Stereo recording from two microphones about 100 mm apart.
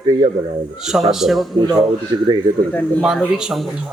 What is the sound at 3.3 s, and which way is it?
Speech, 5° right (ahead or behind).